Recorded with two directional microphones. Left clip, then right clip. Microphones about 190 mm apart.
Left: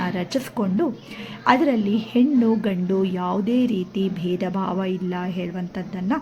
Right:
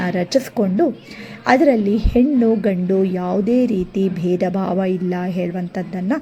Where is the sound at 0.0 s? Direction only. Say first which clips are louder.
Right 7 dB; 20° right (ahead or behind).